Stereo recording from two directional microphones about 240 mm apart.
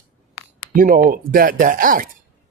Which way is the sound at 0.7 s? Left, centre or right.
Right.